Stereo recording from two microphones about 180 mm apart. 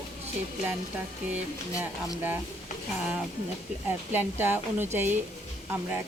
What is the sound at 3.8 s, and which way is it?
Speech, 10° right (ahead or behind).